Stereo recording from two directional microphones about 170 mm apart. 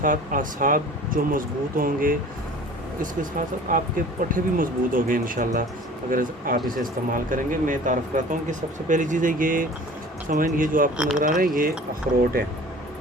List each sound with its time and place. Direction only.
0.0 s speech: 50° right (ahead or behind)
10.9 s speech: 5° right (ahead or behind)
11.2 s speech: 55° right (ahead or behind)